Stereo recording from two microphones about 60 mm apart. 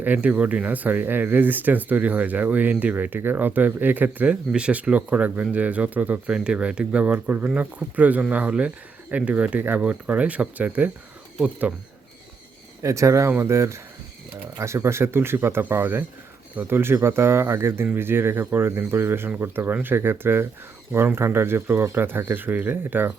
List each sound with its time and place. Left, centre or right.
0.0 s speech: right
6.3 s speech: centre
12.8 s speech: right